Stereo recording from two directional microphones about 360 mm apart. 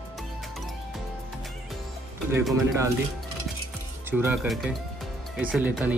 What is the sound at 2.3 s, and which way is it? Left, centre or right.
Speech, centre.